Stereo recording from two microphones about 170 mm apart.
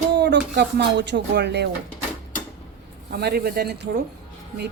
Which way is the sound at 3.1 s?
70° right (ahead or behind).